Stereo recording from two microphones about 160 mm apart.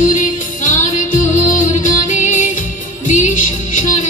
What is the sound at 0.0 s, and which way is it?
Music, 55° left (ahead or behind).